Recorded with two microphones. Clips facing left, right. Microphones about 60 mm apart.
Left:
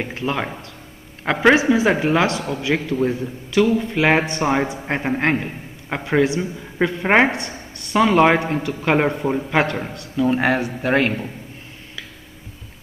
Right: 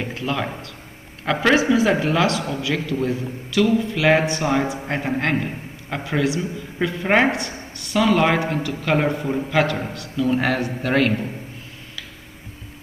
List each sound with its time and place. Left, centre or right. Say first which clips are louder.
0.0 s a man's voice: left 1 dB; left